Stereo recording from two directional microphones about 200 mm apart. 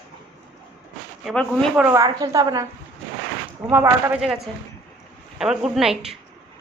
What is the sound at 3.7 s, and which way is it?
Speech, 10° right (ahead or behind).